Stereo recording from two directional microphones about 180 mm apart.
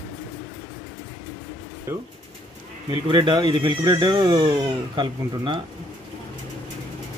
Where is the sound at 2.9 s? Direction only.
25° right (ahead or behind).